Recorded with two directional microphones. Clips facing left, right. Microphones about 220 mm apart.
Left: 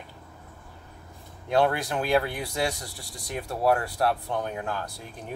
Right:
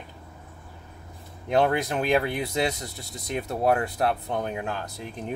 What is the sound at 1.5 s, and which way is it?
Speech, 20° right (ahead or behind).